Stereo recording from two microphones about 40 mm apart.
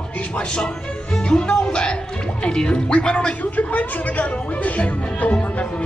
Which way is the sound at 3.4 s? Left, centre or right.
Left.